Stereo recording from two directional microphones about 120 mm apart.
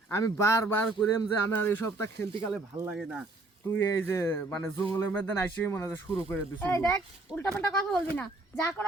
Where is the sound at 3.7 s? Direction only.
20° left (ahead or behind).